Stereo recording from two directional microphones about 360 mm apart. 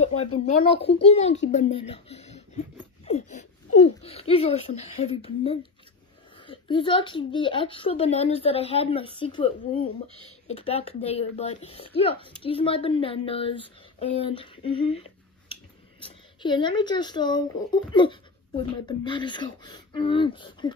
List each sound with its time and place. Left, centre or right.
0.0 s a woman's voice: centre